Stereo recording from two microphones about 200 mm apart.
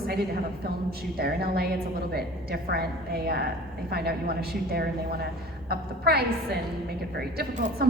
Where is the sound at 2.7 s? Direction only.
50° right (ahead or behind).